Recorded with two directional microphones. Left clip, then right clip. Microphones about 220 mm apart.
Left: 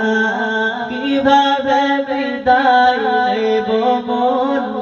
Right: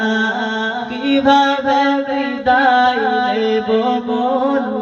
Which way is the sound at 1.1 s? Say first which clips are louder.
Even; 5° right (ahead or behind).